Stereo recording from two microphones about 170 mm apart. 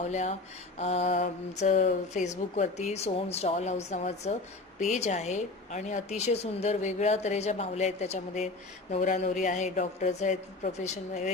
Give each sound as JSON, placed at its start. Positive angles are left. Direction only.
{"t": 0.1, "sound": "a woman's voice", "side_deg": 40}